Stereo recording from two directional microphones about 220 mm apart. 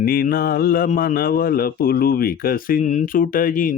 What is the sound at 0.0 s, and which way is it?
Mantra, 40° left (ahead or behind).